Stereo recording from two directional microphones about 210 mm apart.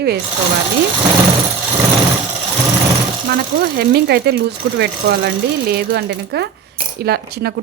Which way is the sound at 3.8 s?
50° right (ahead or behind).